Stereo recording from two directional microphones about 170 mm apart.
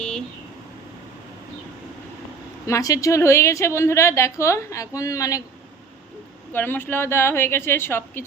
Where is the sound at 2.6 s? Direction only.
20° left (ahead or behind).